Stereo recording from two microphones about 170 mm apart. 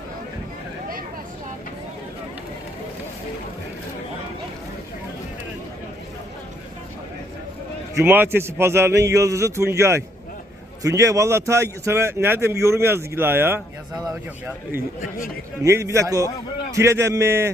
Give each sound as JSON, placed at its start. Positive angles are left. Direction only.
{"t": 7.9, "sound": "a man's voice", "side_deg": -10}
{"t": 15.6, "sound": "a man's voice", "side_deg": -20}